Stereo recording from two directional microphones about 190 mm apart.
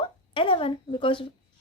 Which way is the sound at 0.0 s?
25° left (ahead or behind).